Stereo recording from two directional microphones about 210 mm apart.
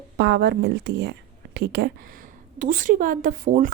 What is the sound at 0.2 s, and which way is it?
A woman's voice, 55° right (ahead or behind).